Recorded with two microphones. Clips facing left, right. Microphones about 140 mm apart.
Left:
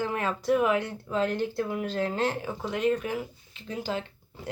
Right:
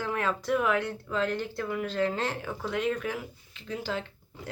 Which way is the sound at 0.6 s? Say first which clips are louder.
Left 2 dB; centre (ahead or behind).